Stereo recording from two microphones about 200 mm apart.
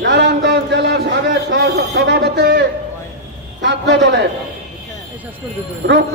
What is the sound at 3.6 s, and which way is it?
Speech, 60° right (ahead or behind).